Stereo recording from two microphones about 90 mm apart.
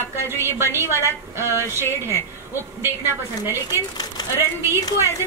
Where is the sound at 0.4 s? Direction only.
25° right (ahead or behind).